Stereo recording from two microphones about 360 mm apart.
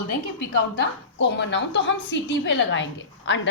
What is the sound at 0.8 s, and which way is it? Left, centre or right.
A woman's voice, left.